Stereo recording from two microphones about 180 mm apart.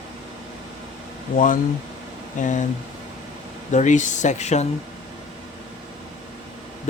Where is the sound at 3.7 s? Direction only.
40° left (ahead or behind).